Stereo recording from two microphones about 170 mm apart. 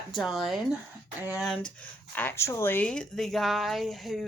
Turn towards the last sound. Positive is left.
turn(degrees=0)  # may be behind; listen again after turning